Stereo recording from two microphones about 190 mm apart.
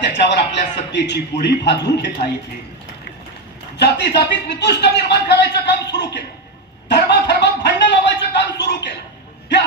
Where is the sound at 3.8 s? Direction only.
60° left (ahead or behind).